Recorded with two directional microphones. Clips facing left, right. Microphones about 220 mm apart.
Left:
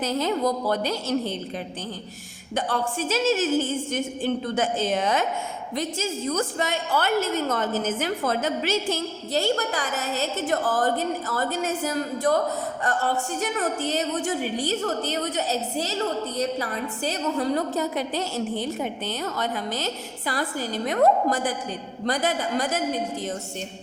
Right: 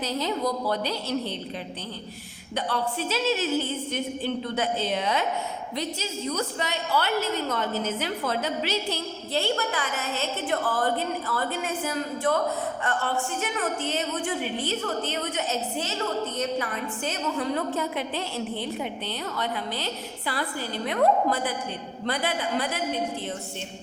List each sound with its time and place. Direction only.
0.0 s a woman's voice: 50° left (ahead or behind)
2.6 s a woman's voice: 50° left (ahead or behind)